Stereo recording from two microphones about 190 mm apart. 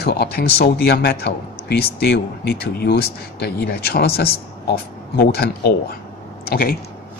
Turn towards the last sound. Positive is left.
turn(degrees=50)  # may be behind; listen again after turning